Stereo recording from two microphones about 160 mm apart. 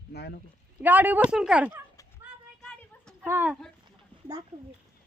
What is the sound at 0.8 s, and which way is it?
Speech, 10° right (ahead or behind).